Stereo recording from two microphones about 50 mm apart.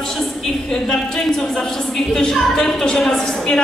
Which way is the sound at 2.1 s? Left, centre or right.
Centre.